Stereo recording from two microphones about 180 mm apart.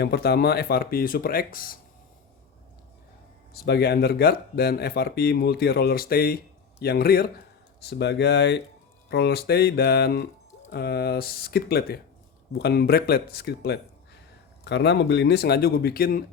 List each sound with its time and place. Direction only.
0.0 s speech: 60° left (ahead or behind)
3.5 s speech: 60° left (ahead or behind)
7.9 s speech: 70° left (ahead or behind)
14.6 s speech: 75° left (ahead or behind); by 16.2 s 55° left (ahead or behind)